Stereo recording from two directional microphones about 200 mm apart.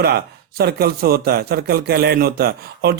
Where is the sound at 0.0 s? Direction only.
50° right (ahead or behind).